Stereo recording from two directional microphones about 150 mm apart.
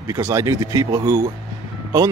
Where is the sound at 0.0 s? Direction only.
20° right (ahead or behind).